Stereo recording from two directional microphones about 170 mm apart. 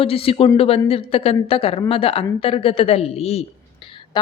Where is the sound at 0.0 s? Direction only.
35° left (ahead or behind).